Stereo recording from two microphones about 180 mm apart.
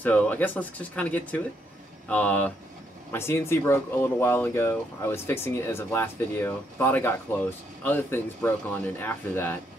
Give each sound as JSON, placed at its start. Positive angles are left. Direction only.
{"t": 0.0, "sound": "speech", "side_deg": 10}